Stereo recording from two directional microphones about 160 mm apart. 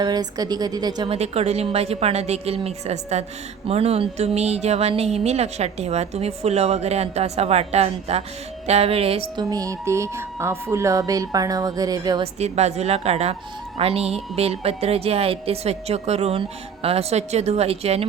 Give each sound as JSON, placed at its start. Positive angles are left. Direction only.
{"t": 0.0, "sound": "speech", "side_deg": -25}
{"t": 1.1, "sound": "speech", "side_deg": -40}
{"t": 9.4, "sound": "speech", "side_deg": -25}
{"t": 12.2, "sound": "a woman's voice", "side_deg": -40}